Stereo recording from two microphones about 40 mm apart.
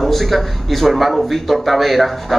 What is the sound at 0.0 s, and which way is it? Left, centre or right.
A man's voice, centre.